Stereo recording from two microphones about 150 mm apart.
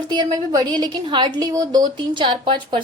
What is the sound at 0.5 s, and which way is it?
A woman's voice, 30° right (ahead or behind).